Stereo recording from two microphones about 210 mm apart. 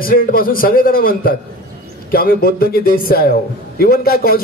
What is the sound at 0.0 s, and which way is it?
A man's voice, 45° left (ahead or behind).